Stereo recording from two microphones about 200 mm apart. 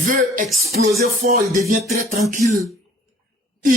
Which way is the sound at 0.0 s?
40° right (ahead or behind).